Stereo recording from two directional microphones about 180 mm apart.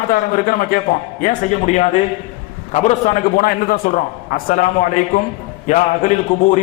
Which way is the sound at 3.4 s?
55° left (ahead or behind).